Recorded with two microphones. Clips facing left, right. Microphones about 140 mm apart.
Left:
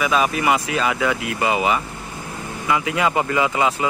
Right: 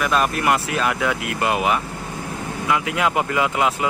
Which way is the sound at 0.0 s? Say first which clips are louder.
Left 1 dB; centre (ahead or behind).